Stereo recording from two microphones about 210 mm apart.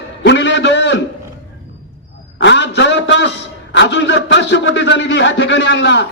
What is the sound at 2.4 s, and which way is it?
A man's voice, 55° left (ahead or behind).